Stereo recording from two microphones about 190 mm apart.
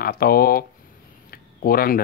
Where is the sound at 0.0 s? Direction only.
50° left (ahead or behind).